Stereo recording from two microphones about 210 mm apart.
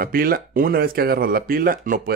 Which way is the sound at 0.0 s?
45° right (ahead or behind).